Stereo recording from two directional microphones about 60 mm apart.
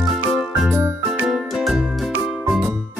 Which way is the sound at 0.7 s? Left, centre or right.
Right.